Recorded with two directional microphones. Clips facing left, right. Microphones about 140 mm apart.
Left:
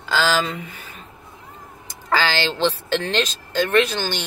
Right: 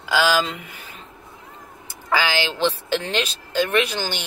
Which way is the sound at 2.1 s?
10° right (ahead or behind).